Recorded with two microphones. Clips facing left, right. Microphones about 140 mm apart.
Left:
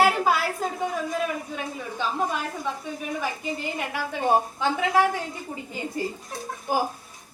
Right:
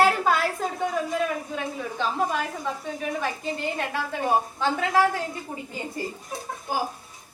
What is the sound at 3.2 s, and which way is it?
Speech, 5° left (ahead or behind).